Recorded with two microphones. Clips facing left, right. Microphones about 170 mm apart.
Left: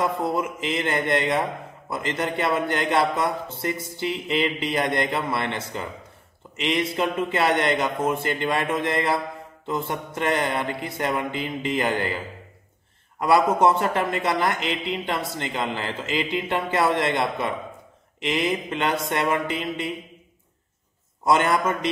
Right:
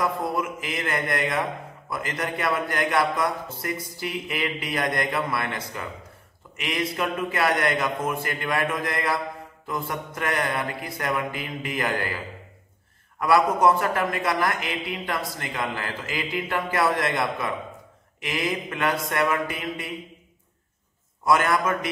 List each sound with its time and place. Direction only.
0.0 s a man's voice: 25° left (ahead or behind)
13.2 s a man's voice: 25° left (ahead or behind)
21.2 s a man's voice: 25° left (ahead or behind)